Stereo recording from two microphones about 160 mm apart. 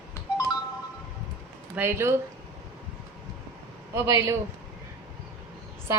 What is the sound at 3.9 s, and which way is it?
Speech, 15° right (ahead or behind).